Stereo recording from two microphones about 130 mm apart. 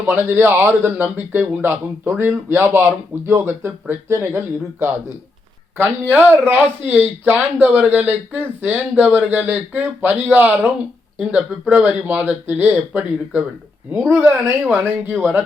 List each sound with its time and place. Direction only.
0.1 s speech: 15° right (ahead or behind)
11.7 s speech: 10° right (ahead or behind)